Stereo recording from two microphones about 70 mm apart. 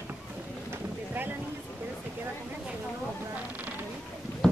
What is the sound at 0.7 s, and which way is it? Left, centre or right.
Boat, right.